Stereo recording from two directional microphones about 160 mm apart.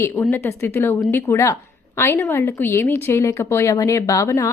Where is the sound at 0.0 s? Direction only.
15° left (ahead or behind).